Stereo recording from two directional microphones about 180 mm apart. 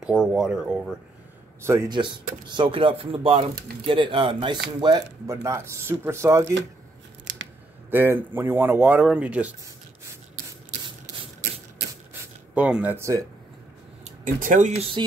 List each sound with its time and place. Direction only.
0.2 s speech: 5° right (ahead or behind)
1.6 s speech: 15° right (ahead or behind)
7.9 s speech: 10° right (ahead or behind)
12.1 s a sound: 5° right (ahead or behind)
14.0 s speech: 45° right (ahead or behind)